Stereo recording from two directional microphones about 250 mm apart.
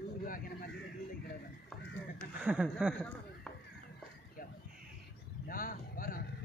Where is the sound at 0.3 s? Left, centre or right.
Left.